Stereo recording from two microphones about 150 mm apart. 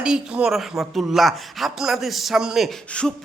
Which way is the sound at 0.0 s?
5° right (ahead or behind).